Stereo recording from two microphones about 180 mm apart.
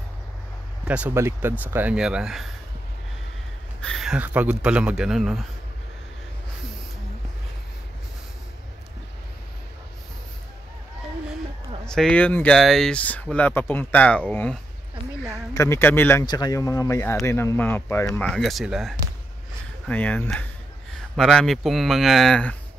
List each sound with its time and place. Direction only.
0.8 s speech: 10° right (ahead or behind)
3.8 s speech: centre (ahead or behind)
11.8 s speech: 5° left (ahead or behind)